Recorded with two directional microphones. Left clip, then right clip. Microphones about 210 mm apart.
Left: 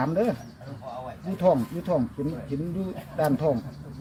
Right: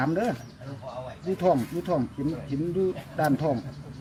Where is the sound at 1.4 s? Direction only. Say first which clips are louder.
Left 2 dB; 20° left (ahead or behind).